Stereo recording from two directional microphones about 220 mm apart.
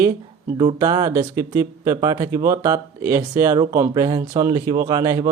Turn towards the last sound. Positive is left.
turn(degrees=-15)  # may be behind; listen again after turning